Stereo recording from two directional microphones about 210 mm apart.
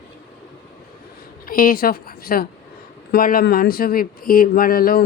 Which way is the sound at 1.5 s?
40° left (ahead or behind).